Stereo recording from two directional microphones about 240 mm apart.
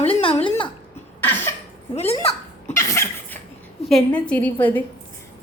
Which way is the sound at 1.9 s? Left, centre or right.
Left.